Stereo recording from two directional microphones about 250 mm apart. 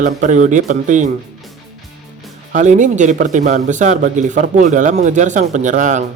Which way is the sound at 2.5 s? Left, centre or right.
Right.